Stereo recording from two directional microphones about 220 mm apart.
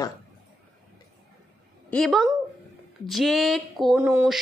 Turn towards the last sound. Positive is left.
turn(degrees=-10)  # may be behind; listen again after turning